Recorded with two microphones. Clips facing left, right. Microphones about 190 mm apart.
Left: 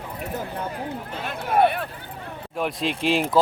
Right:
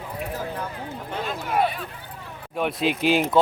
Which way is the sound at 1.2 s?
60° left (ahead or behind).